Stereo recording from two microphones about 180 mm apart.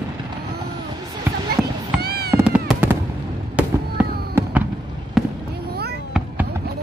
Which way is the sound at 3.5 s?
10° right (ahead or behind).